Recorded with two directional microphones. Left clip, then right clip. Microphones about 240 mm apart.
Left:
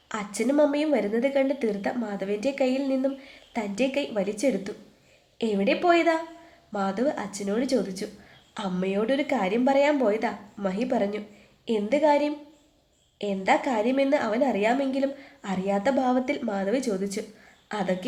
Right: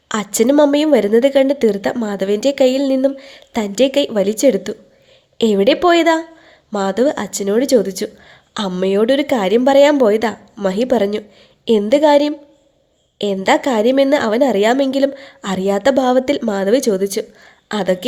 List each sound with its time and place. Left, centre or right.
0.1 s a woman's voice: right